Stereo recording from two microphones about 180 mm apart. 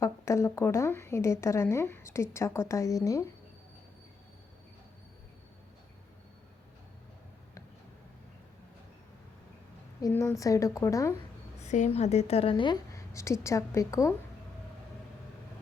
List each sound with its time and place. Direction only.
0.0 s speech: 15° left (ahead or behind)
10.0 s speech: 15° left (ahead or behind)
11.6 s a woman's voice: 40° left (ahead or behind); by 14.1 s 15° left (ahead or behind)